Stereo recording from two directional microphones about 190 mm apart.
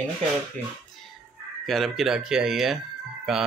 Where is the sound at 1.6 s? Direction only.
Centre (ahead or behind).